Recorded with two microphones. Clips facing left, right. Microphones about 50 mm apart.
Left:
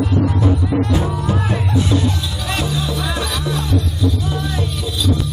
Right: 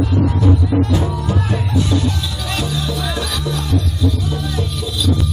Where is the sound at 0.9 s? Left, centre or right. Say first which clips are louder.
Even; centre.